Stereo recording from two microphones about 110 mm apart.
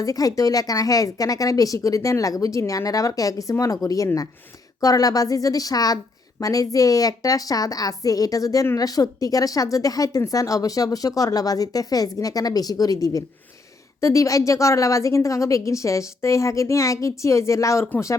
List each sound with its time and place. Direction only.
0.0 s a woman's voice: 35° left (ahead or behind)